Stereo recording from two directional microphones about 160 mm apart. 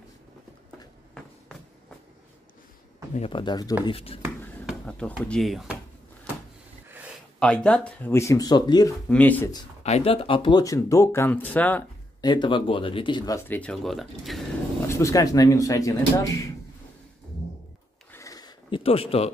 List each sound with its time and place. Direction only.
3.2 s speech: 35° left (ahead or behind)
3.8 s speech: 35° left (ahead or behind)
4.6 s a sound: 5° left (ahead or behind)
5.2 s speech: 5° left (ahead or behind)
7.3 s speech: 5° left (ahead or behind); by 8.9 s 25° left (ahead or behind)
9.1 s speech: 10° left (ahead or behind)
9.8 s speech: 40° left (ahead or behind)
10.6 s speech: 20° left (ahead or behind)
12.2 s speech: 30° left (ahead or behind); by 14.4 s centre (ahead or behind)
14.9 s speech: 20° left (ahead or behind)
18.1 s a sound: 20° left (ahead or behind)
18.8 s speech: 35° left (ahead or behind)